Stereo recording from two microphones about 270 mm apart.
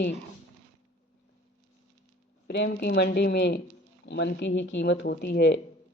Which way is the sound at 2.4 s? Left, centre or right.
Left.